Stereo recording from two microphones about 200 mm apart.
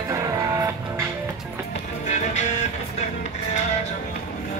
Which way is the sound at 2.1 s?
35° left (ahead or behind).